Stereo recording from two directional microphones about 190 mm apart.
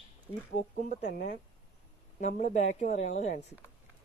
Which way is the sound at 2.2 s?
40° left (ahead or behind).